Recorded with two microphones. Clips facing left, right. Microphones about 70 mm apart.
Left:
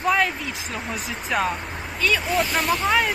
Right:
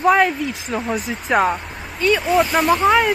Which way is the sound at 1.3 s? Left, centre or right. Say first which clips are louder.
Right 7 dB; right.